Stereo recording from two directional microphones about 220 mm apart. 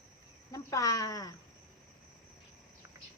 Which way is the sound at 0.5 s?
15° left (ahead or behind).